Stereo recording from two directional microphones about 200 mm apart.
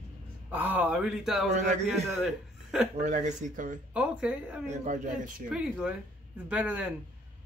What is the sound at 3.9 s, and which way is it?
Speech, 5° right (ahead or behind).